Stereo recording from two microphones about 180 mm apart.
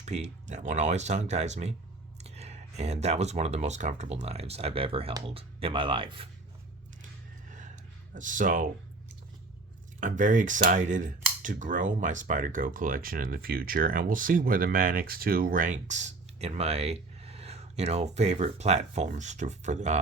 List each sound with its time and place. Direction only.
0.0 s speech: 40° right (ahead or behind)
7.4 s a sound: 45° right (ahead or behind)
8.1 s speech: 45° right (ahead or behind)
10.0 s speech: 45° right (ahead or behind)